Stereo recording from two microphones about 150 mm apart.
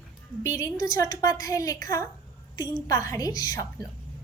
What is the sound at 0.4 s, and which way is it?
Child singing, 20° left (ahead or behind).